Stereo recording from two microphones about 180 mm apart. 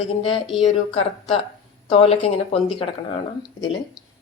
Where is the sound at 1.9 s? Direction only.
35° left (ahead or behind).